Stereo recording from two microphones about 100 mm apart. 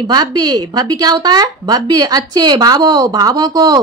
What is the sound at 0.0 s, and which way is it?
A woman's voice, 40° right (ahead or behind).